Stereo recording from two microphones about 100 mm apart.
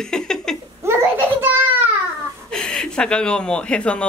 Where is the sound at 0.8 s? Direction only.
20° right (ahead or behind).